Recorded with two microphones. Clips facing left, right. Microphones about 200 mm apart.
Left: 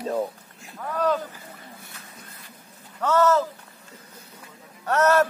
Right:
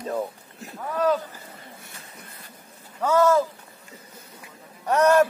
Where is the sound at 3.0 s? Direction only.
10° right (ahead or behind).